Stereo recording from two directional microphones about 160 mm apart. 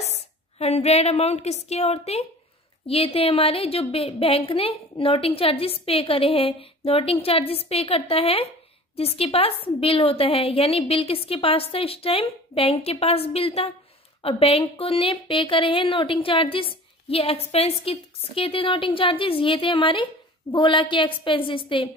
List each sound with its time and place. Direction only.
0.0 s a woman's voice: 45° left (ahead or behind)